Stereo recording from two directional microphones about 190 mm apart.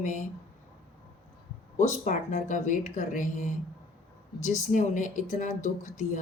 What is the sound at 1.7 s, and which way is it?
Speech, 40° left (ahead or behind).